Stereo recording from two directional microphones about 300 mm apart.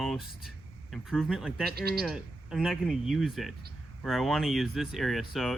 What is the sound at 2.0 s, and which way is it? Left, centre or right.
Speech, centre.